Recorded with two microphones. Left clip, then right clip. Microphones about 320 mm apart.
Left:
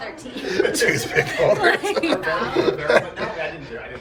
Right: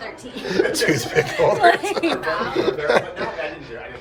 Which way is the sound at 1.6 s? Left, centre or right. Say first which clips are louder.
Right 3 dB; right.